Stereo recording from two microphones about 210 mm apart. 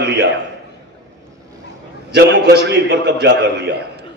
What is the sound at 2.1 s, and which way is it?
A man's voice, 50° right (ahead or behind).